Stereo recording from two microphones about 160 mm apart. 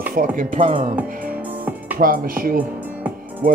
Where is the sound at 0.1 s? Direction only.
60° right (ahead or behind).